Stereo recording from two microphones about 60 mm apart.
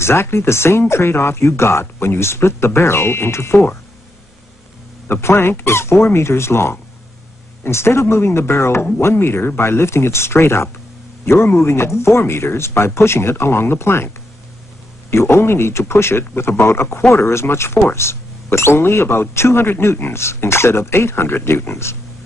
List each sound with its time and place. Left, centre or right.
0.0 s speech: left
5.0 s speech: left